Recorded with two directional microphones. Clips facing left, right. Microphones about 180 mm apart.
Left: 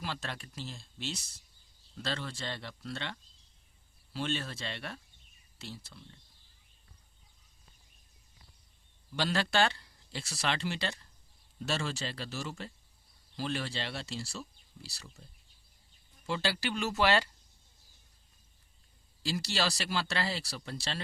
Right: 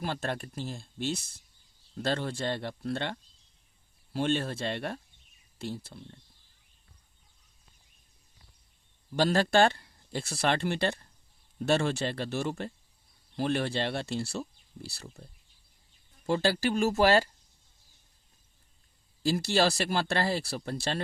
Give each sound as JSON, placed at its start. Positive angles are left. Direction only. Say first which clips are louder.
{"t": 0.0, "sound": "speech", "louder": "right 7 dB", "side_deg": -50}
{"t": 9.1, "sound": "speech", "louder": "right 6 dB", "side_deg": -45}
{"t": 19.2, "sound": "speech", "louder": "right 7 dB", "side_deg": -50}